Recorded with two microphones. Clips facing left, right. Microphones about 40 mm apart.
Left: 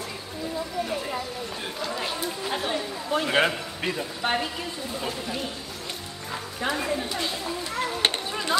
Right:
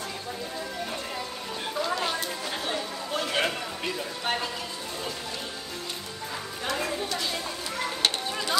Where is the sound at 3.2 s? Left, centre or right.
Left.